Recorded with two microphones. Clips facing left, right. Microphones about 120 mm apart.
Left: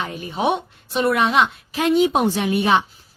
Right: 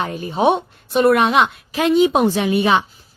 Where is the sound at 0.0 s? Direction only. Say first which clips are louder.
Right 5 dB; 35° right (ahead or behind).